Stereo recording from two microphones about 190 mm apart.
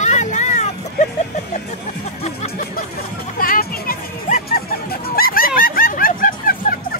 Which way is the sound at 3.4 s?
50° left (ahead or behind).